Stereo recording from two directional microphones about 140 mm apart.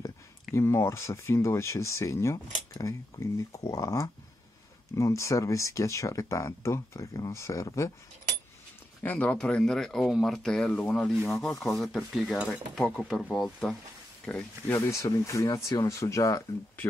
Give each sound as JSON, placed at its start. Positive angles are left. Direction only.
{"t": 0.0, "sound": "speech", "side_deg": 20}
{"t": 9.0, "sound": "speech", "side_deg": 10}
{"t": 12.7, "sound": "speech", "side_deg": 10}
{"t": 14.9, "sound": "speech", "side_deg": 20}